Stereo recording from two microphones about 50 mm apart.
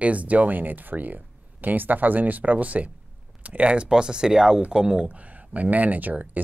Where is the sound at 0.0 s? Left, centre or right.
Right.